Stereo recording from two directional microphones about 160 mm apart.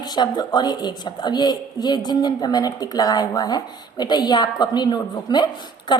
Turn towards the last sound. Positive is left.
turn(degrees=25)  # may be behind; listen again after turning